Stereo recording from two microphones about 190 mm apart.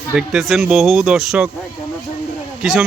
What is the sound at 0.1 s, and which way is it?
Speech, centre (ahead or behind).